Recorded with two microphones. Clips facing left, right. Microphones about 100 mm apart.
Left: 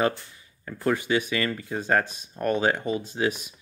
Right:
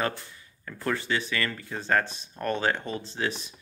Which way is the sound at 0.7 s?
15° left (ahead or behind).